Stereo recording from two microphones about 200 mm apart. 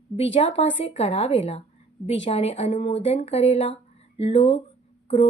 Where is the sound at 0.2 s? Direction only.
30° left (ahead or behind).